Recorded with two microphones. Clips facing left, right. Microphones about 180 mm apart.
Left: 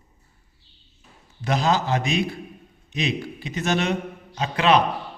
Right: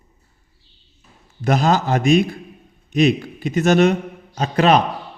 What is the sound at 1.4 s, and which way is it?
A man's voice, 45° right (ahead or behind).